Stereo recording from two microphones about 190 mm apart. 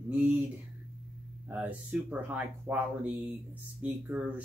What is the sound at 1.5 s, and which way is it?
Speech, 10° right (ahead or behind).